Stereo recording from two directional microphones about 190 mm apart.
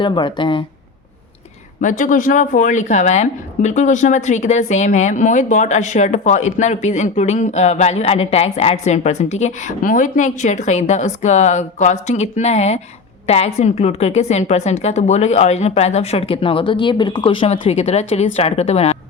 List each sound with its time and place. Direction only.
0.0 s speech: 25° left (ahead or behind)
1.8 s speech: 45° left (ahead or behind)